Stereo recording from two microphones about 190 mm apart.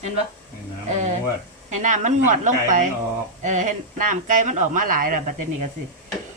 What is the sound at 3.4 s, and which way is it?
Speech, 40° right (ahead or behind).